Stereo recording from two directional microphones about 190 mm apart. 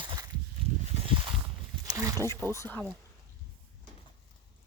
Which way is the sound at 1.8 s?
20° right (ahead or behind).